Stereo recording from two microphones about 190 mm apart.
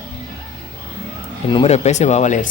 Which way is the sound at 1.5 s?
30° left (ahead or behind).